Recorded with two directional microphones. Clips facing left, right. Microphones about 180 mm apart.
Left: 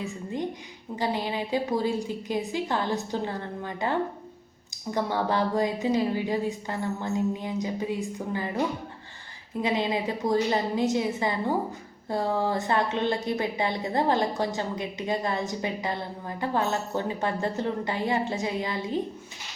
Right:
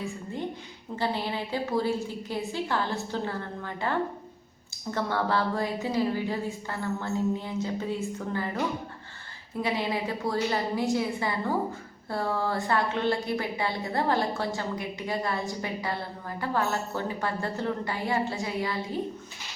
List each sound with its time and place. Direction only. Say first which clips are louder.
0.0 s a woman's voice: left 2 dB; 15° left (ahead or behind)